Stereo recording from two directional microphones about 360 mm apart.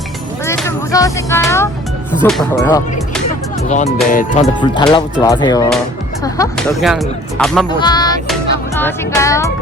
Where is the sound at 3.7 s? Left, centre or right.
Centre.